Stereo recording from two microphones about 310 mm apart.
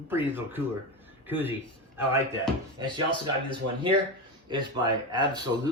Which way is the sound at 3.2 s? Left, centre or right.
Centre.